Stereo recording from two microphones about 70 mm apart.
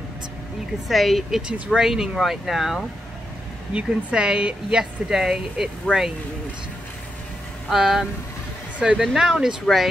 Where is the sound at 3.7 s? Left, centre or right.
Centre.